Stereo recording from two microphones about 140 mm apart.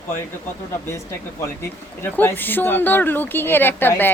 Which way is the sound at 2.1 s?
15° left (ahead or behind).